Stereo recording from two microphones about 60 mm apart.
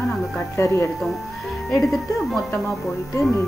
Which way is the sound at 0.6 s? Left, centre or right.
Left.